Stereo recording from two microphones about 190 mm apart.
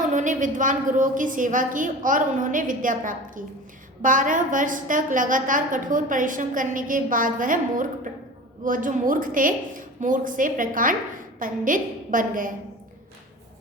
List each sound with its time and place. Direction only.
0.1 s a woman's voice: 40° right (ahead or behind)